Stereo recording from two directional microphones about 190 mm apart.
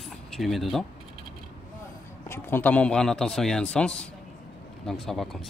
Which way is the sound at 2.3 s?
10° left (ahead or behind).